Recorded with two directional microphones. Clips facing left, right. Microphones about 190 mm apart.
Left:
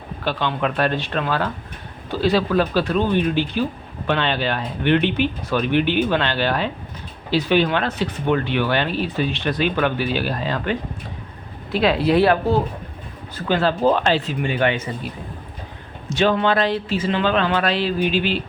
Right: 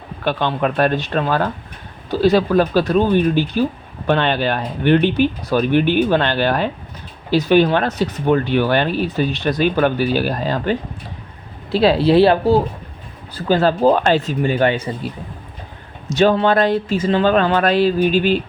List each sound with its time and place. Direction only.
0.3 s speech: 50° right (ahead or behind)
16.0 s speech: 40° right (ahead or behind)